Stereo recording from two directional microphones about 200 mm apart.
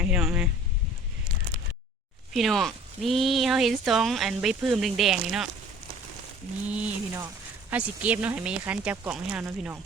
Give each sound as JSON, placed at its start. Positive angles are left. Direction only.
{"t": 0.0, "sound": "a sound", "side_deg": -5}
{"t": 2.3, "sound": "speech", "side_deg": 0}
{"t": 6.7, "sound": "speech", "side_deg": -5}